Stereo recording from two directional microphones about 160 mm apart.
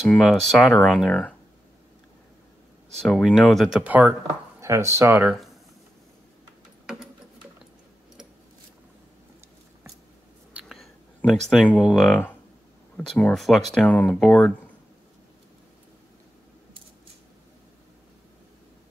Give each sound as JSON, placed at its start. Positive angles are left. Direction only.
{"t": 0.3, "sound": "speech", "side_deg": 0}
{"t": 3.0, "sound": "speech", "side_deg": 5}
{"t": 10.5, "sound": "whispering", "side_deg": 0}
{"t": 11.1, "sound": "speech", "side_deg": 5}